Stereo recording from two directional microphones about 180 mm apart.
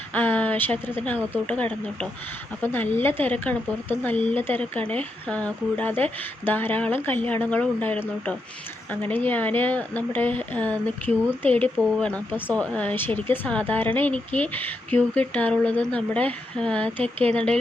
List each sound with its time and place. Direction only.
0.1 s speech: 10° left (ahead or behind)